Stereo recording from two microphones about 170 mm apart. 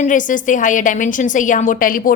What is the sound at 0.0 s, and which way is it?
A woman's voice, 50° left (ahead or behind).